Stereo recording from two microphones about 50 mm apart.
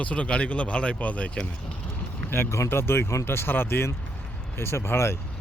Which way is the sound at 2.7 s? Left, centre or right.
Left.